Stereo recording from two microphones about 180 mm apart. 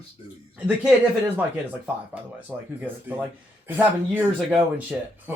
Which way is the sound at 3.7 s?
10° right (ahead or behind).